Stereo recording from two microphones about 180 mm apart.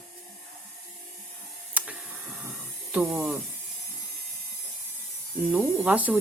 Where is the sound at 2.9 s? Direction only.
5° right (ahead or behind).